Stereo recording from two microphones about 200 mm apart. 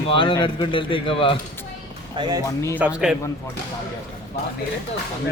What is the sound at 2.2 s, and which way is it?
Speech, 20° right (ahead or behind).